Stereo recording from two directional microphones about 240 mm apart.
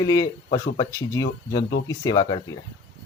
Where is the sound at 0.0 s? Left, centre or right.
Centre.